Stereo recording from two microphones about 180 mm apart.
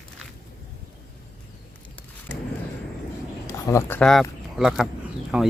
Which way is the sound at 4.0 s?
5° left (ahead or behind).